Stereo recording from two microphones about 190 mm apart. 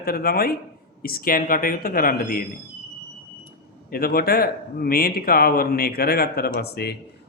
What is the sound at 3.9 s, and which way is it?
Speech, 50° left (ahead or behind).